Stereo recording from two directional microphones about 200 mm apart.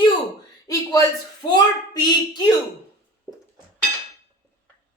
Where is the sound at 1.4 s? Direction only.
20° left (ahead or behind).